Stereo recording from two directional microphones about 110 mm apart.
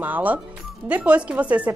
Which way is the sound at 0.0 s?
15° right (ahead or behind).